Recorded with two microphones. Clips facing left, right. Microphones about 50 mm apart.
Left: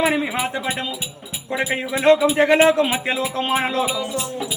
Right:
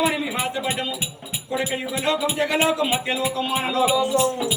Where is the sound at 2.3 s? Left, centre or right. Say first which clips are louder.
Left 6 dB; left.